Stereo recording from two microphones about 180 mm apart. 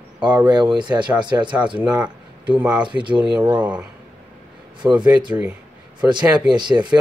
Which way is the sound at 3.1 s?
5° right (ahead or behind).